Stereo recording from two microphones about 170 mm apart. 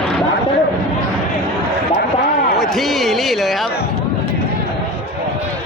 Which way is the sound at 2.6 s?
Centre (ahead or behind).